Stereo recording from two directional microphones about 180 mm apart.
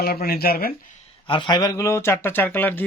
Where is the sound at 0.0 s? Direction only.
60° left (ahead or behind).